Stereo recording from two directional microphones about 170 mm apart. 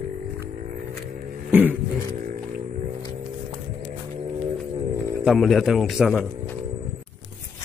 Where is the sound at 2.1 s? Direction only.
50° right (ahead or behind).